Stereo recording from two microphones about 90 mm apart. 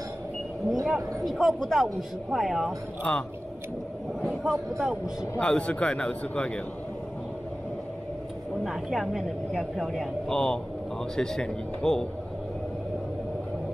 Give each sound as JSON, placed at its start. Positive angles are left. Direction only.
{"t": 0.8, "sound": "speech", "side_deg": -5}
{"t": 3.0, "sound": "a man's voice", "side_deg": 15}
{"t": 4.3, "sound": "speech", "side_deg": 0}
{"t": 5.4, "sound": "a man's voice", "side_deg": 10}
{"t": 8.6, "sound": "a man's voice", "side_deg": -5}